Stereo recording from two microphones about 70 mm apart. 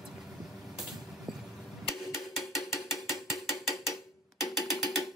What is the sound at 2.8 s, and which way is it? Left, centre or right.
Mechanisms, centre.